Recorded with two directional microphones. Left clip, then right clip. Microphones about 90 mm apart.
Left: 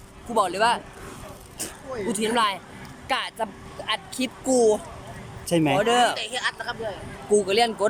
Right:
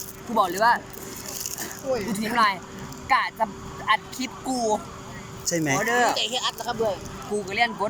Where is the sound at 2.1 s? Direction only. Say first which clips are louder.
Even; 25° left (ahead or behind).